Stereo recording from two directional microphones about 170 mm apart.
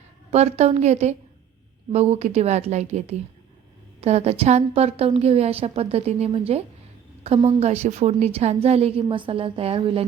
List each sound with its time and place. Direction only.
0.3 s a woman's voice: 40° right (ahead or behind)